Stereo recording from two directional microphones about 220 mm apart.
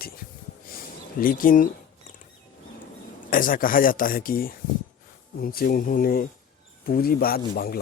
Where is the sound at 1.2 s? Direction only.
40° left (ahead or behind).